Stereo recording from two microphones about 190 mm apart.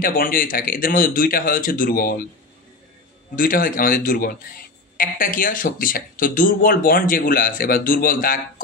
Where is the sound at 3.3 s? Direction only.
45° left (ahead or behind).